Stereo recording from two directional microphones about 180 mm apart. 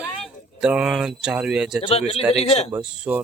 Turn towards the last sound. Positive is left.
turn(degrees=-5)  # may be behind; listen again after turning